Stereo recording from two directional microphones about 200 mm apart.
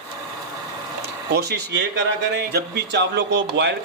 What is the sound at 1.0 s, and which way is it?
Speech, 55° right (ahead or behind).